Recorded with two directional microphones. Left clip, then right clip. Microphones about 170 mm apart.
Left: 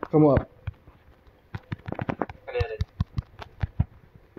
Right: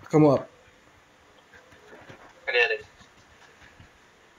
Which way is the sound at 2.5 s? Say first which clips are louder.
Right 9 dB; 50° right (ahead or behind).